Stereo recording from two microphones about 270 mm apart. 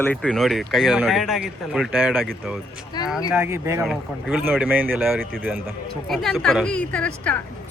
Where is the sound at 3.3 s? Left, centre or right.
Centre.